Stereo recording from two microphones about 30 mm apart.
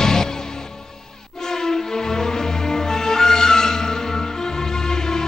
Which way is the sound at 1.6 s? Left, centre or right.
Centre.